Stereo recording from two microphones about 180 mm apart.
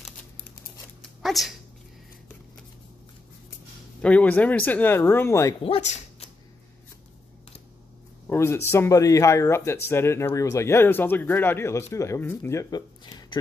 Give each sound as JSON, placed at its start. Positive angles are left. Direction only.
{"t": 1.2, "sound": "speech", "side_deg": 0}
{"t": 4.0, "sound": "speech", "side_deg": 10}
{"t": 5.6, "sound": "speech", "side_deg": 30}
{"t": 8.3, "sound": "speech", "side_deg": 15}